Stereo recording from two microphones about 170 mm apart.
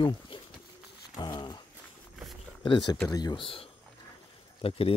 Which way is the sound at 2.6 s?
25° left (ahead or behind).